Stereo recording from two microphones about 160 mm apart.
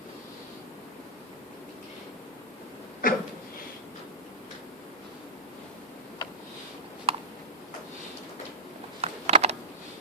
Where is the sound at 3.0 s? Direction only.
60° left (ahead or behind).